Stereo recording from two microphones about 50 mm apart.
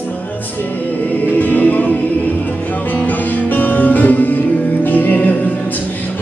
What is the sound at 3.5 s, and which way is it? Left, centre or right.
Music, left.